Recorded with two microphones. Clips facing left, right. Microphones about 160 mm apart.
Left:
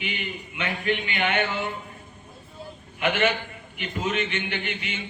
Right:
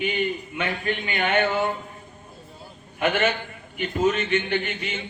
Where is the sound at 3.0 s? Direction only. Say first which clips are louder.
Right 1 dB; 45° right (ahead or behind).